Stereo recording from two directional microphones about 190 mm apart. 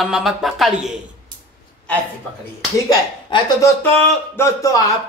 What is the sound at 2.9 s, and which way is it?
Speech, 20° left (ahead or behind).